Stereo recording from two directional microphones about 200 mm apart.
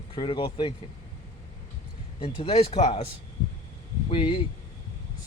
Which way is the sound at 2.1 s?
30° left (ahead or behind).